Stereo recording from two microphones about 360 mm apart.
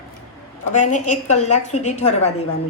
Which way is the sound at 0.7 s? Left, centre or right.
Centre.